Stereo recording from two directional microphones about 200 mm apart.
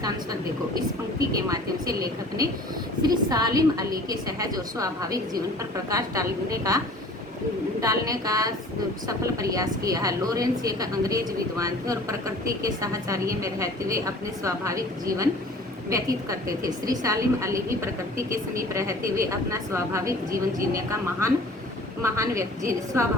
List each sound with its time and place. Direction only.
0.8 s a woman's voice: 15° right (ahead or behind)